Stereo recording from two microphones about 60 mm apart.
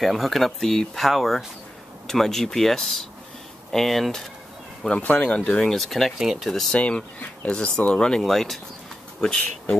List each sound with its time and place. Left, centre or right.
0.0 s speech: centre
4.8 s speech: centre
5.6 s speech: centre
6.7 s speech: centre
8.2 s speech: centre